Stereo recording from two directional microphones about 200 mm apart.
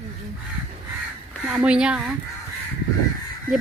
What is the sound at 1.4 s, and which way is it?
Speech, 5° right (ahead or behind).